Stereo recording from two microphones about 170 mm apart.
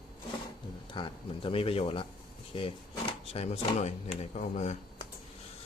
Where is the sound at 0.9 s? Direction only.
30° left (ahead or behind).